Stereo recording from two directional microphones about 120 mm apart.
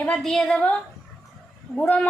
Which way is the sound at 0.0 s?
5° left (ahead or behind).